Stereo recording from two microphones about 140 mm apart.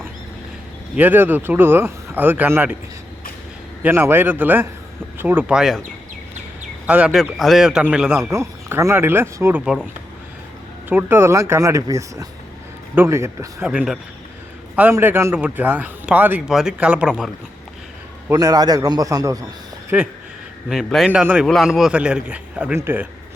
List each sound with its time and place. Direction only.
0.9 s speech: 15° right (ahead or behind)
3.8 s speech: 15° right (ahead or behind)
6.8 s a man's voice: 10° right (ahead or behind)
8.2 s speech: 20° right (ahead or behind)
10.8 s speech: 15° right (ahead or behind)
13.7 s a man's voice: 5° right (ahead or behind)
18.3 s speech: 25° right (ahead or behind)
19.9 s a man's voice: 10° right (ahead or behind)
21.4 s speech: centre (ahead or behind); by 23.0 s 15° right (ahead or behind)